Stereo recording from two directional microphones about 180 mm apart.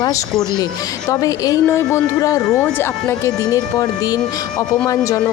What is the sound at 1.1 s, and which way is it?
Speech, 20° left (ahead or behind).